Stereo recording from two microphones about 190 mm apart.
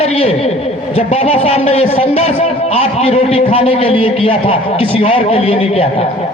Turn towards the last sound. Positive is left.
turn(degrees=30)  # may be behind; listen again after turning